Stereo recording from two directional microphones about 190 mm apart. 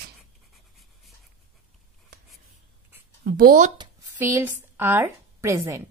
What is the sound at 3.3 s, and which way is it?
Speech, 50° right (ahead or behind).